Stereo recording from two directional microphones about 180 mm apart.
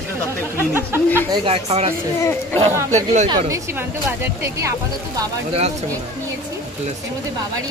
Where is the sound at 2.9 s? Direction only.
40° right (ahead or behind).